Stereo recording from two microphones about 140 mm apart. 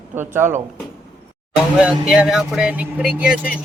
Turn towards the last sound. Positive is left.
turn(degrees=-10)  # may be behind; listen again after turning